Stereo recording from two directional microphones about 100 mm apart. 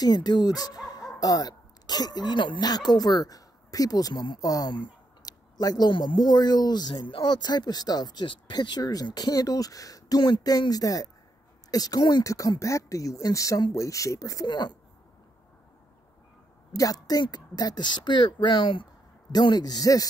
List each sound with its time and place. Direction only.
0.0 s speech: 45° left (ahead or behind)
16.7 s speech: 35° left (ahead or behind); by 18.9 s 55° left (ahead or behind)
19.3 s speech: 45° left (ahead or behind)